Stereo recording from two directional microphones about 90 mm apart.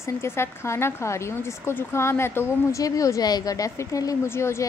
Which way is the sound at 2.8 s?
40° left (ahead or behind).